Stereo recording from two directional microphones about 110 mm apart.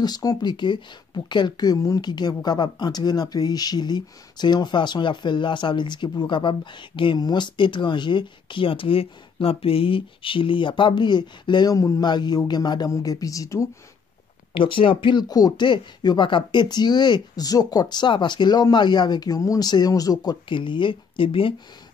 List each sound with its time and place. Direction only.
0.0 s speech: 35° left (ahead or behind)
14.5 s speech: 50° left (ahead or behind); by 20.3 s 35° left (ahead or behind)
20.4 s speech: 50° left (ahead or behind)